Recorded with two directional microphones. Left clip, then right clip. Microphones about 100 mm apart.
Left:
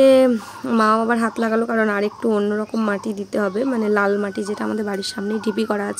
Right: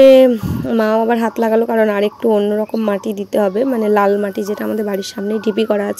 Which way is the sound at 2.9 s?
25° right (ahead or behind).